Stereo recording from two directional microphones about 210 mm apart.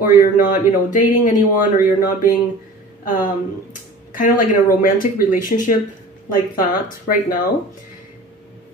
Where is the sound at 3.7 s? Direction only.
40° left (ahead or behind).